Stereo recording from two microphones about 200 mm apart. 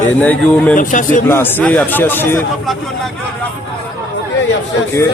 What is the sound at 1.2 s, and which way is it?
Speech, 10° left (ahead or behind).